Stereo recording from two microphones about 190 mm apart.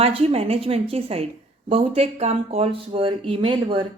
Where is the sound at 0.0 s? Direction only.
30° right (ahead or behind).